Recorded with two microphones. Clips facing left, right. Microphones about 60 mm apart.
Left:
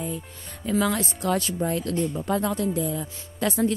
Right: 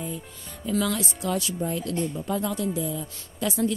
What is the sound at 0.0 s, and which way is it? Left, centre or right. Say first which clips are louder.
Music: left 2 dB; left.